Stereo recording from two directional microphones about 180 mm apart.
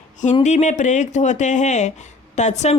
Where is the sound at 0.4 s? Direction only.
40° left (ahead or behind).